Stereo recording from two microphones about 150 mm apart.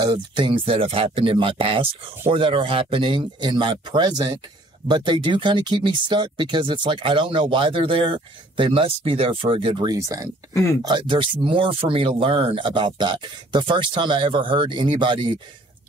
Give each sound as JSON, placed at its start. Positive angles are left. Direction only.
{"t": 0.0, "sound": "speech", "side_deg": -30}
{"t": 10.5, "sound": "speech", "side_deg": 20}
{"t": 10.8, "sound": "speech", "side_deg": -30}